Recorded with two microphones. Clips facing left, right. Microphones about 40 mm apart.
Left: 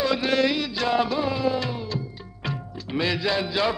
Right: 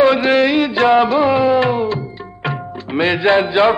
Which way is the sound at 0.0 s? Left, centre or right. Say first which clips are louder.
Right 10 dB; right.